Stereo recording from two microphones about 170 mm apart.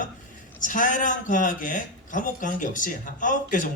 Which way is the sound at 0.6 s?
50° left (ahead or behind).